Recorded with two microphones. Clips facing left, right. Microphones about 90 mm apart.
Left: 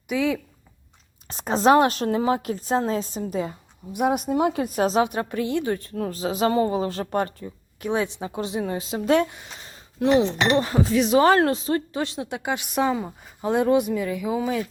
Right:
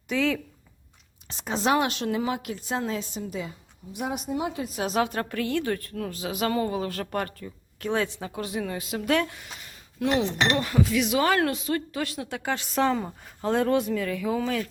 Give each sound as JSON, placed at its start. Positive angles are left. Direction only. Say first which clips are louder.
{"t": 0.1, "sound": "speech", "louder": "left 2 dB", "side_deg": 10}
{"t": 1.3, "sound": "a woman's voice", "louder": "left 7 dB", "side_deg": 40}
{"t": 3.9, "sound": "a woman's voice", "louder": "left 8 dB", "side_deg": 55}
{"t": 4.9, "sound": "a woman's voice", "louder": "left 4 dB", "side_deg": 20}
{"t": 13.5, "sound": "speech", "louder": "left 3 dB", "side_deg": 15}